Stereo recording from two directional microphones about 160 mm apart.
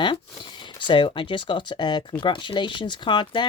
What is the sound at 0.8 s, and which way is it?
Speech, 30° left (ahead or behind).